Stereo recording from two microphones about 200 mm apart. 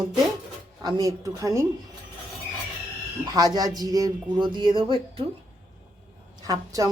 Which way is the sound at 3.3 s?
20° right (ahead or behind).